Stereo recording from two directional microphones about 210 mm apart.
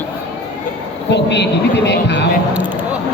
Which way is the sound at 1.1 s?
55° left (ahead or behind).